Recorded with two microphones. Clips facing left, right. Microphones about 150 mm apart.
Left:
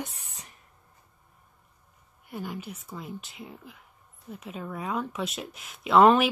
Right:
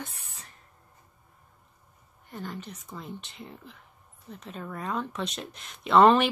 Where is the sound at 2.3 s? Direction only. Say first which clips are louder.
Left 2 dB; 10° left (ahead or behind).